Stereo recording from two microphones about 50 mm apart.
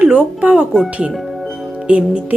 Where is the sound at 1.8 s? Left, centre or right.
Right.